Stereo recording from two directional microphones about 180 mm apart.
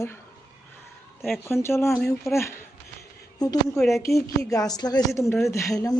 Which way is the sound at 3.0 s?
20° left (ahead or behind).